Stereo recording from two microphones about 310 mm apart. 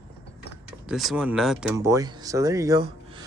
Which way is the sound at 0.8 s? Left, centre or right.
Centre.